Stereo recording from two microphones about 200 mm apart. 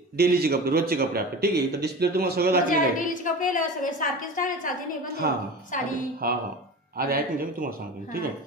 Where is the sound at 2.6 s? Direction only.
40° left (ahead or behind).